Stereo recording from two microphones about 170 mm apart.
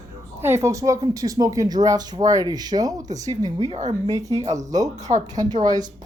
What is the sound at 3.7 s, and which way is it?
Speech, 45° right (ahead or behind).